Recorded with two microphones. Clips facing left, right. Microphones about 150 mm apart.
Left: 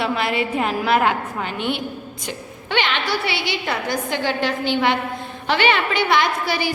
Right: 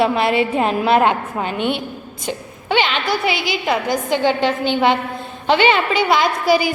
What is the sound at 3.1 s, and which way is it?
A woman's voice, 20° right (ahead or behind).